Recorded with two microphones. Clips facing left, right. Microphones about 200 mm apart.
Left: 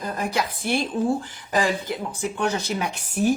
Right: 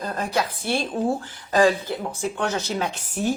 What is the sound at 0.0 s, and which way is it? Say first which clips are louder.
Speech: right 1 dB; 15° left (ahead or behind).